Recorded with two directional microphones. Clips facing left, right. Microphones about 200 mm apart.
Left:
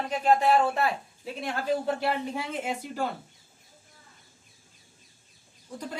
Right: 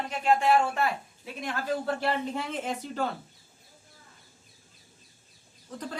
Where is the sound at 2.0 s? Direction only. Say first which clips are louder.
Even; 10° left (ahead or behind).